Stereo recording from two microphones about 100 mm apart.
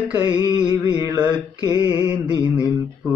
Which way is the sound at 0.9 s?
30° right (ahead or behind).